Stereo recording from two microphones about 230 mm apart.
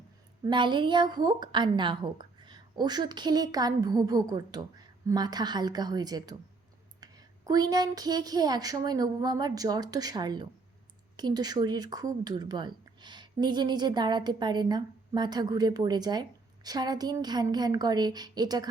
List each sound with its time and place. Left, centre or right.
0.4 s a woman's voice: centre